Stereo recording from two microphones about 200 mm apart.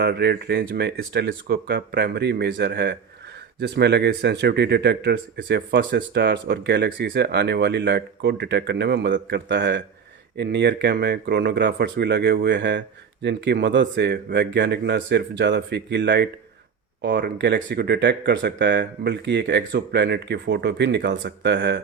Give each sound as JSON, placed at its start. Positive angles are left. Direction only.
{"t": 0.0, "sound": "speech", "side_deg": -55}